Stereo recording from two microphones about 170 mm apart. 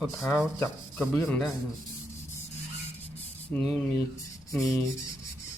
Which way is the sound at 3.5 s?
5° left (ahead or behind).